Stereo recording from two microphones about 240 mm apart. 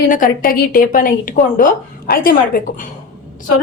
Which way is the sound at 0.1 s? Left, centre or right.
Left.